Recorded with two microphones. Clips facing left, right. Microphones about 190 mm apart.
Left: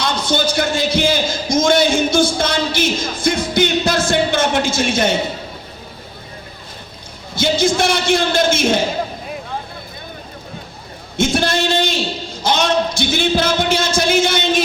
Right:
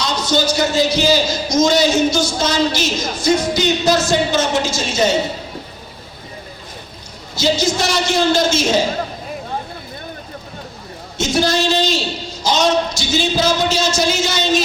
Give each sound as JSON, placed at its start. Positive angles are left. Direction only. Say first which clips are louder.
{"t": 0.0, "sound": "a man's voice", "louder": "right 1 dB", "side_deg": 55}
{"t": 7.3, "sound": "a man's voice", "louder": "left 1 dB", "side_deg": 55}
{"t": 11.2, "sound": "a man's voice", "louder": "even", "side_deg": 55}